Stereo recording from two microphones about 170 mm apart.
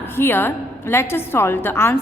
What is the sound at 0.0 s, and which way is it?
A woman's voice, 15° left (ahead or behind).